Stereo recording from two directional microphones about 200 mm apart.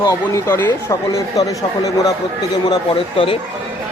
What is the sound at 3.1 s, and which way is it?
Speech, 30° left (ahead or behind).